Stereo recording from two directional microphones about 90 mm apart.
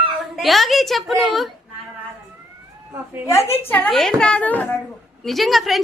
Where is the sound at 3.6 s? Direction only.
20° left (ahead or behind).